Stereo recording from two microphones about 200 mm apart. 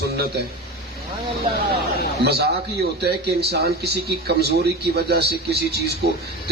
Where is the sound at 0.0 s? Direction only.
55° right (ahead or behind).